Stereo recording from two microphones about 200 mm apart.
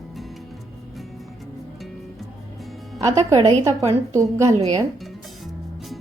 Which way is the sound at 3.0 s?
15° right (ahead or behind).